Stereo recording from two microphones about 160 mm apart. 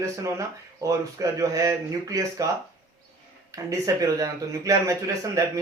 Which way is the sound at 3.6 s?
20° right (ahead or behind).